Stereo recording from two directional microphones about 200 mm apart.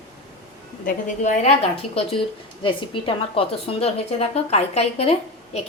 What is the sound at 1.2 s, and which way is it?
A woman's voice, 35° left (ahead or behind).